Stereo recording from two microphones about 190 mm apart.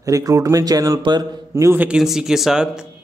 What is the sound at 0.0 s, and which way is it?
A man's voice, 20° right (ahead or behind).